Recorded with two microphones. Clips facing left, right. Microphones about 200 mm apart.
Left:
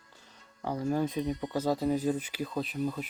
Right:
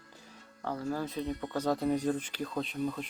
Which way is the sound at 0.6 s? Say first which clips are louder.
Left 4 dB; 15° left (ahead or behind).